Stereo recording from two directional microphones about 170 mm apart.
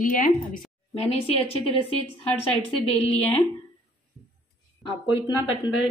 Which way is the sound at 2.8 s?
35° left (ahead or behind).